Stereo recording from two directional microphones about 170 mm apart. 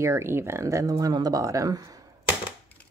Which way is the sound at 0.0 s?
15° right (ahead or behind).